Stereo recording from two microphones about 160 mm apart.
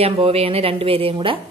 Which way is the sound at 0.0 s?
35° right (ahead or behind).